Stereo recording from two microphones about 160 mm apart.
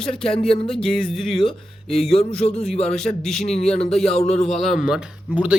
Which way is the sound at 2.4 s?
40° left (ahead or behind).